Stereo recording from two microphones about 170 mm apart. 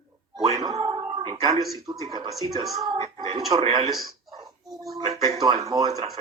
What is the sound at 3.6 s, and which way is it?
Speech, 30° right (ahead or behind).